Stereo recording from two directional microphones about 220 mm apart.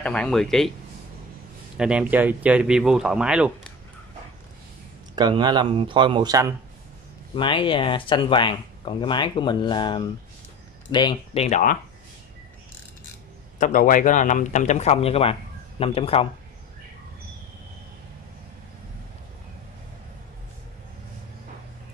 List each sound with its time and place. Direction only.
0.0 s speech: 5° left (ahead or behind)
1.8 s speech: 5° right (ahead or behind)
5.1 s speech: 20° right (ahead or behind)
7.3 s speech: 20° left (ahead or behind)
13.6 s speech: 35° left (ahead or behind)